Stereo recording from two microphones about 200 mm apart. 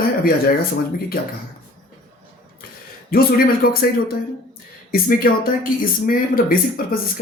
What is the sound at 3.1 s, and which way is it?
Speech, 45° left (ahead or behind).